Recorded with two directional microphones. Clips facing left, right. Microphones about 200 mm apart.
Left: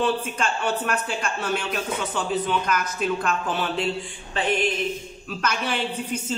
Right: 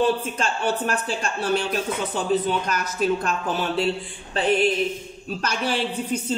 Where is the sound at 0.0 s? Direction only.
35° right (ahead or behind).